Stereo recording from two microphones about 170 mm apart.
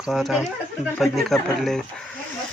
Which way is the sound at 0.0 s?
Centre (ahead or behind).